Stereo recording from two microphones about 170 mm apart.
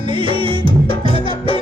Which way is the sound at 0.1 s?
30° right (ahead or behind).